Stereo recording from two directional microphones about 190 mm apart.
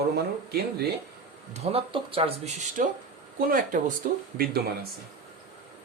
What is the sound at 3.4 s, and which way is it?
Speech, 50° right (ahead or behind).